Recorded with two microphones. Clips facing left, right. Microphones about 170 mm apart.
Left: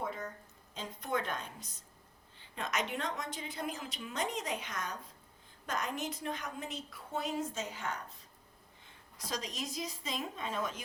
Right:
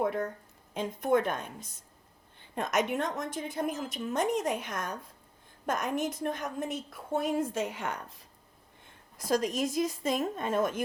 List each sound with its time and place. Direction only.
0.0 s a sound: 60° right (ahead or behind)
0.7 s a woman's voice: 55° right (ahead or behind)
8.9 s a woman's voice: 50° right (ahead or behind)